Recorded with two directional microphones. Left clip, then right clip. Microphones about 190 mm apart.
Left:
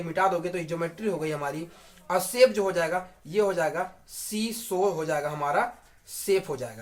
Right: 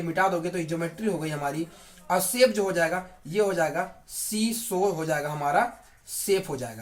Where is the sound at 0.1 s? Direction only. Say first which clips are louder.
Even; 30° left (ahead or behind).